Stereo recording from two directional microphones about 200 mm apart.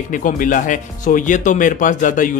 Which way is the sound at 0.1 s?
40° left (ahead or behind).